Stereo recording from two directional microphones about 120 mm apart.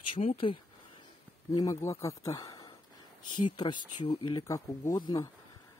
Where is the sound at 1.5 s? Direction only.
30° left (ahead or behind).